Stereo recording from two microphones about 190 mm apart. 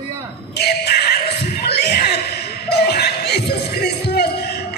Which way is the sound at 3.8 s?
55° left (ahead or behind).